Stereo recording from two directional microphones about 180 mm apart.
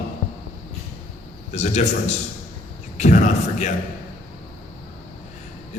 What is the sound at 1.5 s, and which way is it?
A man's voice, 40° left (ahead or behind).